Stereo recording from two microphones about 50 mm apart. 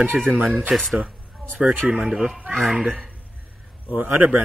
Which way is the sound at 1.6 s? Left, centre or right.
Centre.